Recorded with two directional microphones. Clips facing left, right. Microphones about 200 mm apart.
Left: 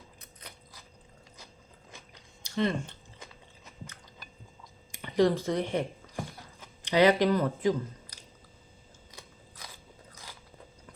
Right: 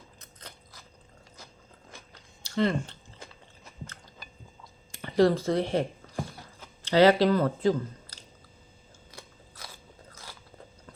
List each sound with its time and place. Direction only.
0.2 s chewing: 15° left (ahead or behind)
1.9 s biting: 15° left (ahead or behind)
4.9 s a sound: 15° left (ahead or behind)
10.1 s biting: 15° left (ahead or behind)